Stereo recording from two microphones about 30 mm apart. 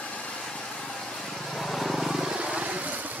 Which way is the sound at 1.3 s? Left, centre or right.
Centre.